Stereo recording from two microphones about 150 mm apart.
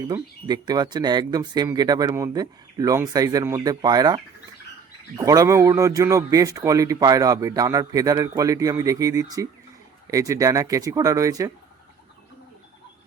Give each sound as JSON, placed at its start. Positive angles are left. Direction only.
{"t": 0.1, "sound": "a man's voice", "side_deg": -30}